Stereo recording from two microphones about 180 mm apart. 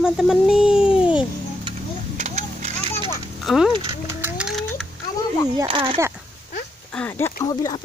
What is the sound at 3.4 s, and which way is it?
Speech, centre (ahead or behind).